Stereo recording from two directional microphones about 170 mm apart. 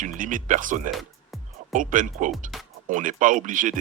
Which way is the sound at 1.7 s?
50° right (ahead or behind).